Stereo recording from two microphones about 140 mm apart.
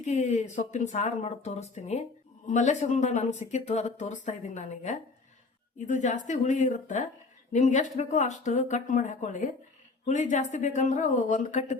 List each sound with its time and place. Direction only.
0.0 s speech: 55° left (ahead or behind)